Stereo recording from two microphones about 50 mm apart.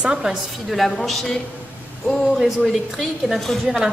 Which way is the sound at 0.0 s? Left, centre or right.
Centre.